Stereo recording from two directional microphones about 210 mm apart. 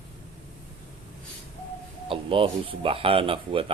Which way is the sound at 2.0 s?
25° right (ahead or behind).